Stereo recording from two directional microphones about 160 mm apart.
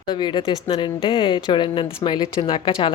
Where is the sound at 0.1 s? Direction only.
30° left (ahead or behind).